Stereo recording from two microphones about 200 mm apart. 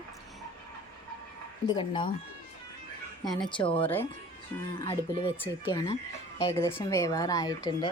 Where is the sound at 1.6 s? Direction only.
25° left (ahead or behind).